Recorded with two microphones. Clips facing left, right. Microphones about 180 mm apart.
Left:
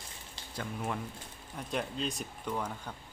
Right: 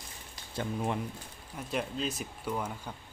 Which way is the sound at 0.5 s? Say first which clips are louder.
Right 4 dB; 25° right (ahead or behind).